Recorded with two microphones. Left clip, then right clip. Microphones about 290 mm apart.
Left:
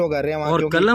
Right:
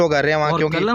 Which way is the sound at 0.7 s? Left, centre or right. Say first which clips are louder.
Left 3 dB; centre.